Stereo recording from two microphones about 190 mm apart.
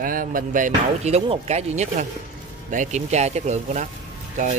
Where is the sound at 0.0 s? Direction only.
45° right (ahead or behind).